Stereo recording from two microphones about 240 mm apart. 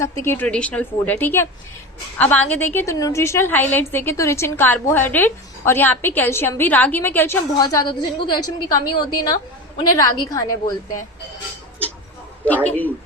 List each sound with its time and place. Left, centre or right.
0.0 s a woman's voice: centre
12.5 s a woman's voice: centre